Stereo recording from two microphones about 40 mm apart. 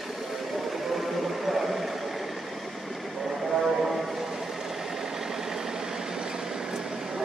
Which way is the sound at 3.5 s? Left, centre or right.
Centre.